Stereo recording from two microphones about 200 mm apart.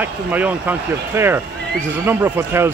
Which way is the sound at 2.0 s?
10° right (ahead or behind).